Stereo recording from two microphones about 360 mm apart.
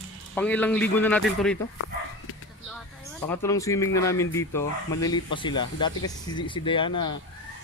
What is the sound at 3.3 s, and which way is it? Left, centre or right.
Speech, centre.